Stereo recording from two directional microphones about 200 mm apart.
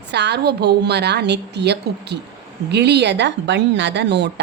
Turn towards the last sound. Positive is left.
turn(degrees=-60)  # may be behind; listen again after turning